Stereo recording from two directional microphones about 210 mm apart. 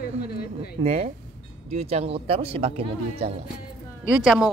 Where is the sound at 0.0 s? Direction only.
45° left (ahead or behind).